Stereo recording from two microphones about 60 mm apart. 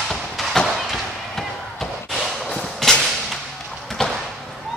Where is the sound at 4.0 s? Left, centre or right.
Centre.